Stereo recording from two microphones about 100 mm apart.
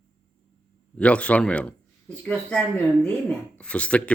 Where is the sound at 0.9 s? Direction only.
10° left (ahead or behind).